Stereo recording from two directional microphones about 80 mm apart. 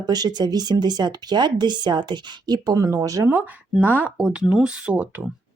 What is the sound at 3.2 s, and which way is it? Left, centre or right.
Speech, right.